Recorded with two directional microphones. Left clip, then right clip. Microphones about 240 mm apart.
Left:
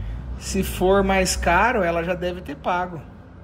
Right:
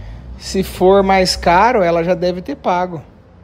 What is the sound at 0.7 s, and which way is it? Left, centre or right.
Speech, right.